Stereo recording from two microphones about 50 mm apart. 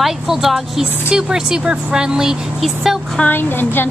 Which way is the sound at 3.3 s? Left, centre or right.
Left.